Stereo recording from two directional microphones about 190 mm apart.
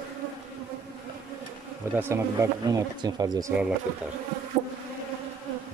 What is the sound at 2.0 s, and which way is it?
Speech, 15° right (ahead or behind).